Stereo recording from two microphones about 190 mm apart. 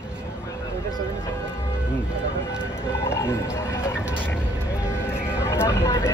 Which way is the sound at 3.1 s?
15° left (ahead or behind).